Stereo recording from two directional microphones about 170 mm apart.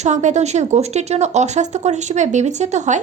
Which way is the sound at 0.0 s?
45° right (ahead or behind).